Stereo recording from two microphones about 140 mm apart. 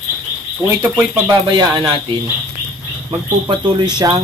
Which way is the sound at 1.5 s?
35° right (ahead or behind).